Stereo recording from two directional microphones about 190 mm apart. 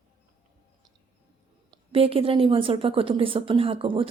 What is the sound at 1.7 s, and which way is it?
A woman's voice, 30° right (ahead or behind).